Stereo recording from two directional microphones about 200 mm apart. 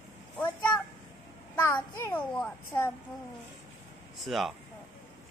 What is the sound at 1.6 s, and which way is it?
Speech, 15° left (ahead or behind).